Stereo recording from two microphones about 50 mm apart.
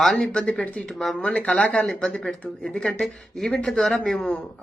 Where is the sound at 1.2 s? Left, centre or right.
Left.